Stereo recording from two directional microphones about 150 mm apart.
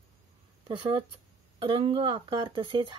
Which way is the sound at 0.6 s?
35° right (ahead or behind).